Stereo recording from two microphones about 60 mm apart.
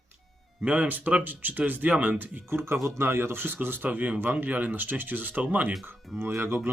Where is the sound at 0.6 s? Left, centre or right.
Right.